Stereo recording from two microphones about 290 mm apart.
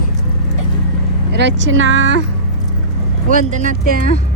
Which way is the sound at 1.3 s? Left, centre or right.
Right.